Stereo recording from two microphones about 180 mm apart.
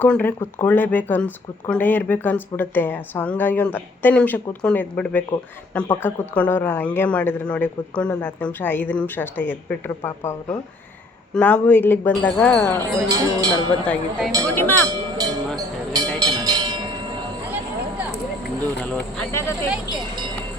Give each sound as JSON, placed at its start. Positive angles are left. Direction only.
{"t": 0.0, "sound": "speech", "side_deg": 10}
{"t": 13.1, "sound": "speech", "side_deg": -20}
{"t": 13.8, "sound": "speech", "side_deg": 5}
{"t": 14.8, "sound": "a sound", "side_deg": -20}
{"t": 16.1, "sound": "train", "side_deg": -20}
{"t": 18.8, "sound": "a sound", "side_deg": 15}